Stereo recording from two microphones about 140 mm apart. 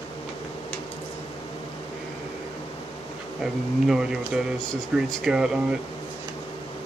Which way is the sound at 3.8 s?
5° right (ahead or behind).